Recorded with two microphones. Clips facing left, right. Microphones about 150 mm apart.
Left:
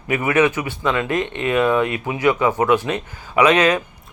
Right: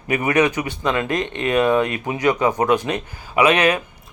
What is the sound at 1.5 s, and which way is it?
Speech, 35° right (ahead or behind).